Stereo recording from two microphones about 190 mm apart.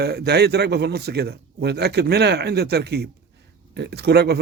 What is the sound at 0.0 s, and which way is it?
A man's voice, 55° right (ahead or behind).